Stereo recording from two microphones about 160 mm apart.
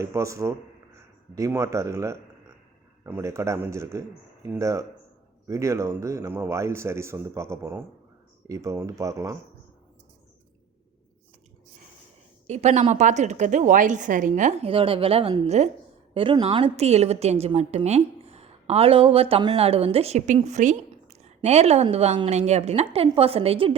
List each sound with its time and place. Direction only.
0.0 s speech: 20° right (ahead or behind)
12.5 s a woman's voice: 45° right (ahead or behind)